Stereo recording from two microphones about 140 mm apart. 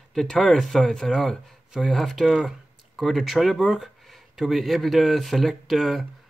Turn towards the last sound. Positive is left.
turn(degrees=0)  # may be behind; listen again after turning